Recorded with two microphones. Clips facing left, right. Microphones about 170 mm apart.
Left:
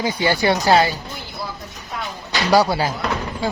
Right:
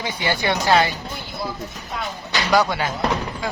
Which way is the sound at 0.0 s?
35° left (ahead or behind).